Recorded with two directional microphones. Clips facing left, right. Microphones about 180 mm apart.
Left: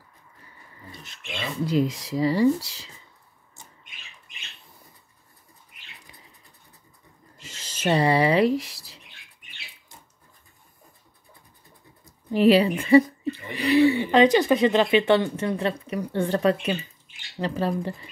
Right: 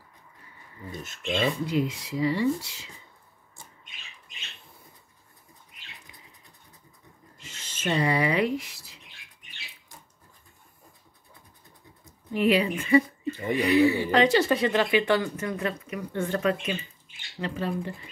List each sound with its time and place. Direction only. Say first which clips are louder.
1.0 s speech: right 9 dB; 50° right (ahead or behind)
1.7 s speech: left 4 dB; 40° left (ahead or behind)
7.4 s speech: left 5 dB; 40° left (ahead or behind)
12.0 s speech: left 5 dB; 35° left (ahead or behind)